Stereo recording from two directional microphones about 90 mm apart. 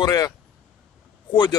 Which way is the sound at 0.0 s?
40° left (ahead or behind).